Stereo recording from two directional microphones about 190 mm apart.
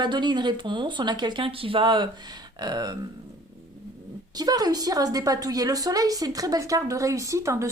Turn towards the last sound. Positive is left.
turn(degrees=-15)  # may be behind; listen again after turning